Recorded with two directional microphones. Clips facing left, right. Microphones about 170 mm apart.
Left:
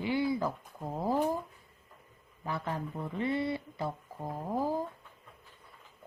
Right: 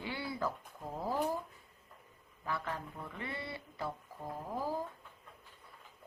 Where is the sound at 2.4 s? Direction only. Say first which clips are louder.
Left 4 dB; 20° left (ahead or behind).